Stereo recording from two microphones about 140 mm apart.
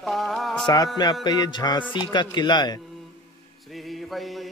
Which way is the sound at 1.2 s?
30° left (ahead or behind).